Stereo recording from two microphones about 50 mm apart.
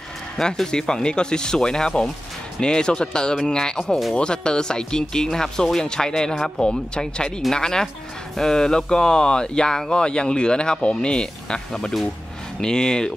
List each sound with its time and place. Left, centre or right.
0.7 s speech: centre